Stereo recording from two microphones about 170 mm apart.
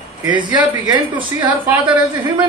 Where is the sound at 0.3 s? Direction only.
25° right (ahead or behind).